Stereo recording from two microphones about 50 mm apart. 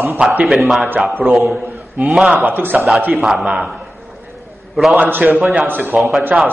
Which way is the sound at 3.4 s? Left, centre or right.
Right.